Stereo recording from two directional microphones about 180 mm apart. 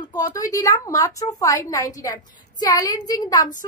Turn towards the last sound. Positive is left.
turn(degrees=20)  # may be behind; listen again after turning